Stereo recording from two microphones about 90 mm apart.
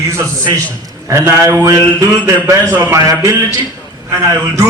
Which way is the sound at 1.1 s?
30° right (ahead or behind).